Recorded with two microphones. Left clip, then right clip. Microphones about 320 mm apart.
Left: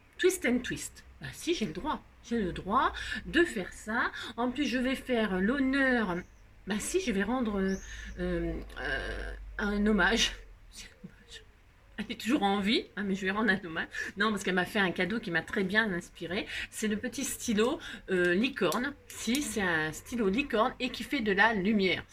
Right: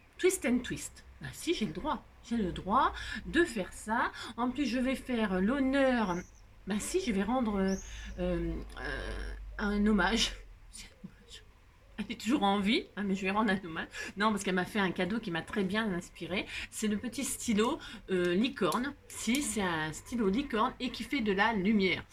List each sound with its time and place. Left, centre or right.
0.2 s speech: centre
11.9 s speech: centre